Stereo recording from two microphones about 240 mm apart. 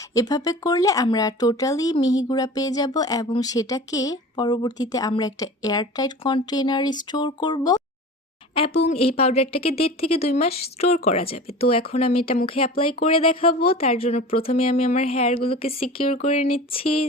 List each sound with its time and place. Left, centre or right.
0.1 s a woman's voice: centre